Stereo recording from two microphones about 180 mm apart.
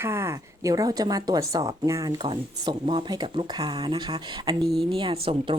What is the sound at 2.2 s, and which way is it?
Speech, 30° right (ahead or behind).